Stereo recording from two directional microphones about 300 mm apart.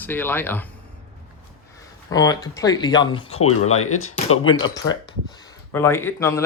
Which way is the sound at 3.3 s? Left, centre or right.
Left.